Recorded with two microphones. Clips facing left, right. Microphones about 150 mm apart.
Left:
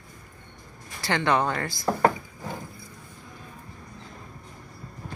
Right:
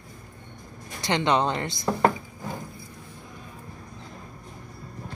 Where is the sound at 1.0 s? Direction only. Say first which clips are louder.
Right 1 dB; 20° right (ahead or behind).